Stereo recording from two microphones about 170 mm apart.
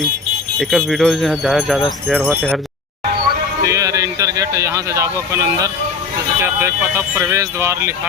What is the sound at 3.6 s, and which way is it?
A man's voice, 20° right (ahead or behind).